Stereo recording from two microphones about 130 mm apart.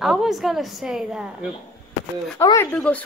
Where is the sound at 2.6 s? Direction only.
10° left (ahead or behind).